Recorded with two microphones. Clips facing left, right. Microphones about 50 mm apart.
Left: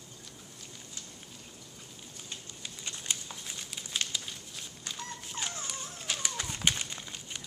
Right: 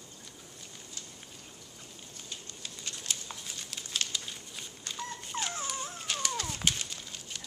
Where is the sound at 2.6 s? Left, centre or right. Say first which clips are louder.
Left 1 dB; centre.